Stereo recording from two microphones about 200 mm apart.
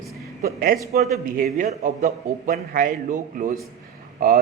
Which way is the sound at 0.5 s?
45° right (ahead or behind).